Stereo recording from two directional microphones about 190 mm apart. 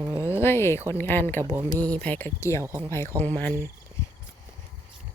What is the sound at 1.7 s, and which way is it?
Speech, 10° left (ahead or behind).